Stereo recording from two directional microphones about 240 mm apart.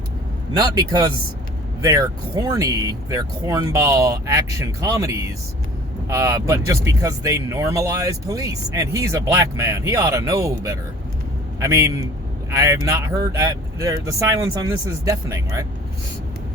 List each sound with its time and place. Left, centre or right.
0.5 s speech: centre